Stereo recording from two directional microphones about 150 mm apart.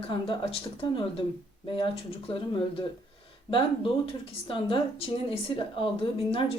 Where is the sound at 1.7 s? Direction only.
35° left (ahead or behind).